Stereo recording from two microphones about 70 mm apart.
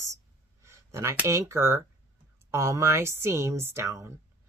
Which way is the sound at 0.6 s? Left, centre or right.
Right.